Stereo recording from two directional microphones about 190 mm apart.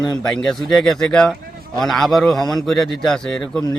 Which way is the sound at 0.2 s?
5° left (ahead or behind).